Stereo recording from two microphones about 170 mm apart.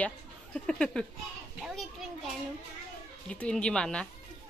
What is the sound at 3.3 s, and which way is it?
Speech, 5° left (ahead or behind).